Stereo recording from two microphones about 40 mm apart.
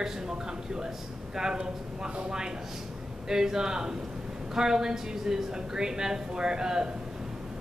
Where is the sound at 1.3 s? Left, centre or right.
Centre.